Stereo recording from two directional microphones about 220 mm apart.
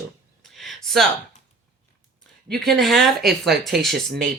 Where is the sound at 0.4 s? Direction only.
Centre (ahead or behind).